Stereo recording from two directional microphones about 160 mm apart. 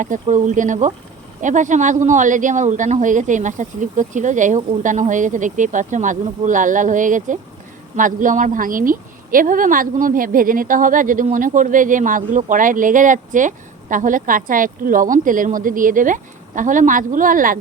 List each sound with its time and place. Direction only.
0.0 s a woman's voice: 50° right (ahead or behind)